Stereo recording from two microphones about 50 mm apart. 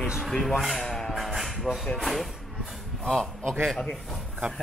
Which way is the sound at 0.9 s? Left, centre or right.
Centre.